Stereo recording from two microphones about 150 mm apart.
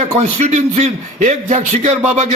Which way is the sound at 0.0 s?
45° right (ahead or behind).